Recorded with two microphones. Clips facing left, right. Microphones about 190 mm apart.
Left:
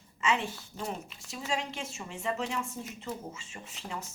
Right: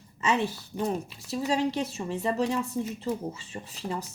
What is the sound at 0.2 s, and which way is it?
A woman's voice, 40° right (ahead or behind).